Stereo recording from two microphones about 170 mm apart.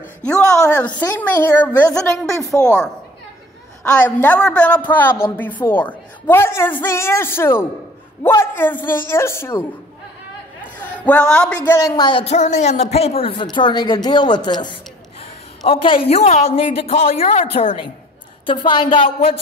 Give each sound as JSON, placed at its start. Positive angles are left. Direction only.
{"t": 0.4, "sound": "a sound", "side_deg": 20}
{"t": 1.0, "sound": "a woman's voice", "side_deg": 10}
{"t": 3.9, "sound": "a woman's voice", "side_deg": 10}
{"t": 10.8, "sound": "a woman's voice", "side_deg": 10}